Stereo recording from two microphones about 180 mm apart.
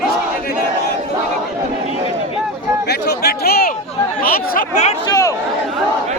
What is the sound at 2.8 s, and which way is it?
Chatter, 65° left (ahead or behind).